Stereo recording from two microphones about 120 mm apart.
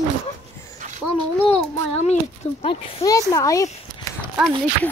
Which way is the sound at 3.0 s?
30° left (ahead or behind).